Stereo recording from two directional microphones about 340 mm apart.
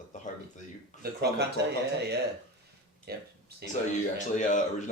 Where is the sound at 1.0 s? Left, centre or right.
Right.